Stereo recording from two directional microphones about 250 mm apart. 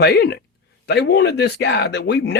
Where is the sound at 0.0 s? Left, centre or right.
Left.